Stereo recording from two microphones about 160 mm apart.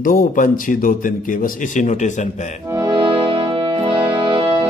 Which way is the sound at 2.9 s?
30° right (ahead or behind).